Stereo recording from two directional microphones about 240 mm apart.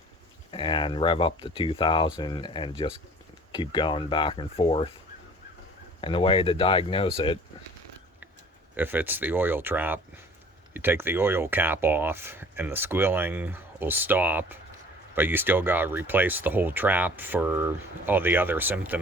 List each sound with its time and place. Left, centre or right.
0.5 s speech: centre
6.0 s speech: left
8.7 s speech: centre